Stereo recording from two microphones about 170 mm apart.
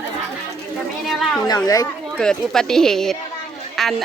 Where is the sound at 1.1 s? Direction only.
Centre (ahead or behind).